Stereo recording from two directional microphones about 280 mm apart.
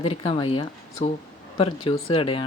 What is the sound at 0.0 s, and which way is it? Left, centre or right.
Speech, centre.